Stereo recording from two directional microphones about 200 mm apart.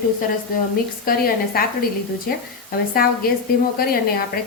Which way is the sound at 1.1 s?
45° left (ahead or behind).